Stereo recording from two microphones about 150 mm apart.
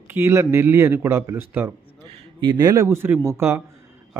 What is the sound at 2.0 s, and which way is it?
A man's voice, 30° right (ahead or behind).